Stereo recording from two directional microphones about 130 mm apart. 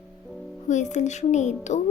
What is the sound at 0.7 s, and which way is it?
Speech, 65° left (ahead or behind).